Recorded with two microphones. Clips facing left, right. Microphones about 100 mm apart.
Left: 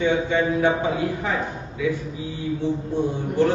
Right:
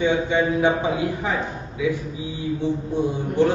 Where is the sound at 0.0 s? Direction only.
15° right (ahead or behind).